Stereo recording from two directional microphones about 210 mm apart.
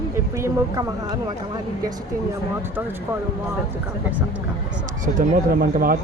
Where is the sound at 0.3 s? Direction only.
15° right (ahead or behind).